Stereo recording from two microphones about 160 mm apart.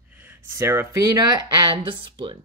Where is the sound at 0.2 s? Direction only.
15° right (ahead or behind).